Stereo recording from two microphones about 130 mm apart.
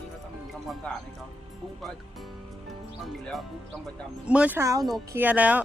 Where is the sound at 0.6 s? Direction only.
Centre (ahead or behind).